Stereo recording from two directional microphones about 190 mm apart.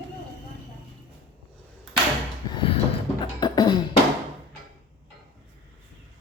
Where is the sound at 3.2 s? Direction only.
25° left (ahead or behind).